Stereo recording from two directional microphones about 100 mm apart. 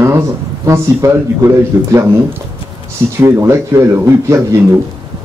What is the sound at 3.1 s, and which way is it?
Speech, 30° right (ahead or behind).